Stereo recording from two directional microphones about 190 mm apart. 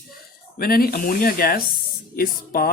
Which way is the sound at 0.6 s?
50° left (ahead or behind).